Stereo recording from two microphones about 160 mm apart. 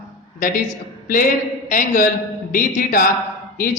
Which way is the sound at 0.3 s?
55° left (ahead or behind).